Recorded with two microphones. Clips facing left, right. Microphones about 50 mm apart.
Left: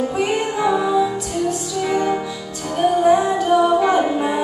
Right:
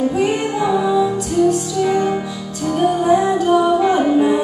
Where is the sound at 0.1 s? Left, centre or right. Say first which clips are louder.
Right 3 dB; left.